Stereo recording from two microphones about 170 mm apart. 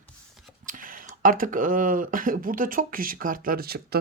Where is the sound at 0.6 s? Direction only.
55° right (ahead or behind).